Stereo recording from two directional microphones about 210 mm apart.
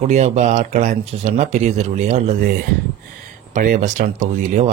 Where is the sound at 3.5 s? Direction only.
35° right (ahead or behind).